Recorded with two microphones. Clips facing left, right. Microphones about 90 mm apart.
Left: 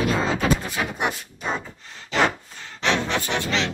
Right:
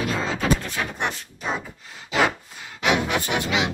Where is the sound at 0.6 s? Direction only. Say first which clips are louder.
Left 2 dB; 15° left (ahead or behind); by 3.7 s 10° right (ahead or behind).